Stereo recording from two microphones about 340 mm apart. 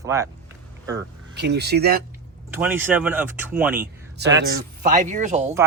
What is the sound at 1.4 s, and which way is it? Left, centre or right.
Speech, right.